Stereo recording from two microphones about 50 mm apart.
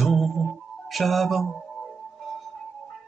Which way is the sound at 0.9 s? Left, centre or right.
Centre.